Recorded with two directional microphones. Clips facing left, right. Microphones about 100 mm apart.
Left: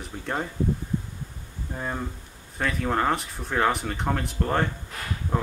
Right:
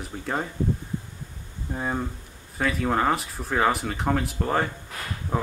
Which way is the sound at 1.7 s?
5° right (ahead or behind).